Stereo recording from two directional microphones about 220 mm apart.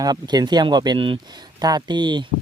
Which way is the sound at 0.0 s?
20° right (ahead or behind).